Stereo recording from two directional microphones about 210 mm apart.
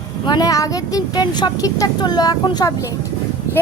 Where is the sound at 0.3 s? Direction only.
20° left (ahead or behind).